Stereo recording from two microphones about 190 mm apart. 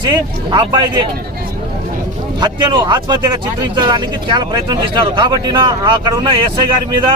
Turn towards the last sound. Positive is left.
turn(degrees=-25)  # may be behind; listen again after turning